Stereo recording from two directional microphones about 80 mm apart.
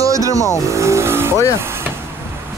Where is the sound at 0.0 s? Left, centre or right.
Right.